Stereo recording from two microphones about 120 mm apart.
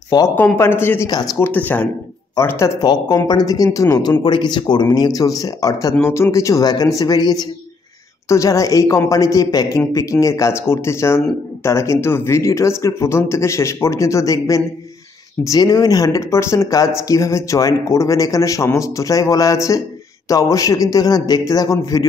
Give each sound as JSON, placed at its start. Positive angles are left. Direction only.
{"t": 0.1, "sound": "speech", "side_deg": 35}
{"t": 0.6, "sound": "speech", "side_deg": 20}
{"t": 1.0, "sound": "speech", "side_deg": 35}
{"t": 1.4, "sound": "speech", "side_deg": 15}
{"t": 2.8, "sound": "speech", "side_deg": 35}